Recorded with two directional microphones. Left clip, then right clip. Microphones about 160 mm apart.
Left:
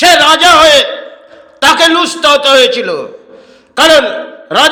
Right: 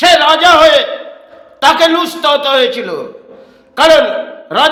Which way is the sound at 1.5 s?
10° left (ahead or behind).